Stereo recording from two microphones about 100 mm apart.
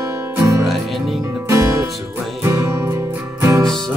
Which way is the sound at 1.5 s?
30° right (ahead or behind).